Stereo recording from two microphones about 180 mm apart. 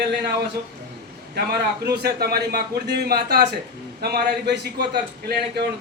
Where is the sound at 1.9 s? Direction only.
60° right (ahead or behind).